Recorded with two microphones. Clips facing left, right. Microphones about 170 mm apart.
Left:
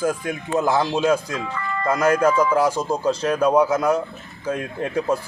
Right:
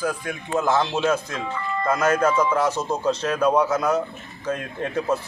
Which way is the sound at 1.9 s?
10° left (ahead or behind).